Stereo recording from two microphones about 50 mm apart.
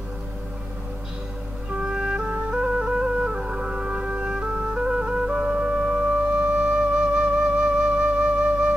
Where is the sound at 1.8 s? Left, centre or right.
Centre.